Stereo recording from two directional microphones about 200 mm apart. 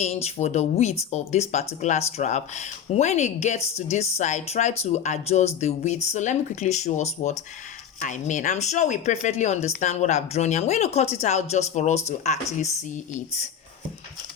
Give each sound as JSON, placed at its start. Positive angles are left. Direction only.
{"t": 0.0, "sound": "speech", "side_deg": 35}